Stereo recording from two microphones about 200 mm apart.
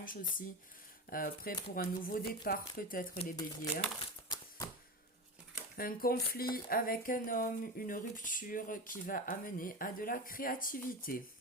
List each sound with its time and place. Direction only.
0.0 s speech: 45° left (ahead or behind)
3.3 s speech: 20° left (ahead or behind)
5.7 s speech: 45° left (ahead or behind)